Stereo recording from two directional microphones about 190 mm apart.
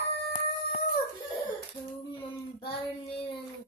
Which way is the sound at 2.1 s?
25° left (ahead or behind).